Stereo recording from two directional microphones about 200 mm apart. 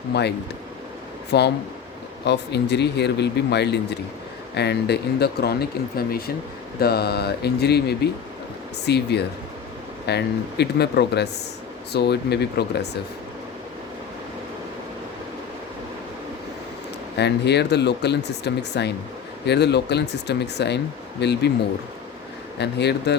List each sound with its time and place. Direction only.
0.1 s speech: 55° left (ahead or behind)
17.2 s speech: 55° left (ahead or behind)
22.5 s speech: 55° left (ahead or behind)